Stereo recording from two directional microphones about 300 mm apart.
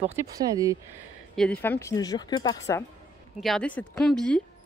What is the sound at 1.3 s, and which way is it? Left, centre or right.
Speech, centre.